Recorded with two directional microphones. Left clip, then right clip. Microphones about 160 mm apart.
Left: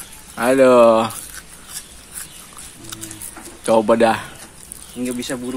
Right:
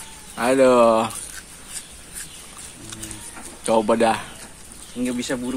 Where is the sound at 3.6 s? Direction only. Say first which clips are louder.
Left 4 dB; 30° left (ahead or behind).